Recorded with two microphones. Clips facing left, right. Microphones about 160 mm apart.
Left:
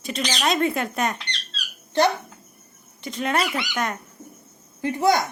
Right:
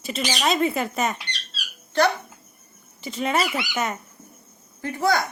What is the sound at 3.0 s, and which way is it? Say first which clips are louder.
Speech: even; centre (ahead or behind).